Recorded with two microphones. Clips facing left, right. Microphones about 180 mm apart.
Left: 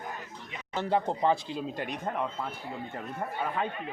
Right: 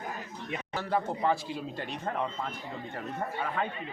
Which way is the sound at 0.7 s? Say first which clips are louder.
Left 3 dB; 20° left (ahead or behind).